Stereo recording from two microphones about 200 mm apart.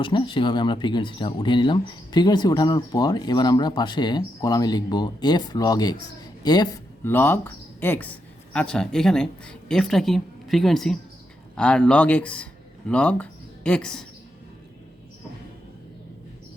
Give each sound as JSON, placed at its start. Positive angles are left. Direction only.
{"t": 0.0, "sound": "a man's voice", "side_deg": 25}